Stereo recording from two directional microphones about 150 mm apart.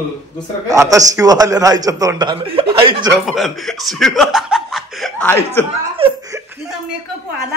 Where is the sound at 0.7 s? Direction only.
25° right (ahead or behind).